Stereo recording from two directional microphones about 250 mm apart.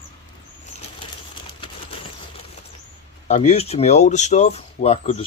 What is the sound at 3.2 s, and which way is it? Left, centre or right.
Speech, left.